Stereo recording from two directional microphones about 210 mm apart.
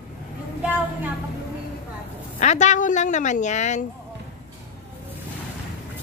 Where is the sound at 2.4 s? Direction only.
35° left (ahead or behind).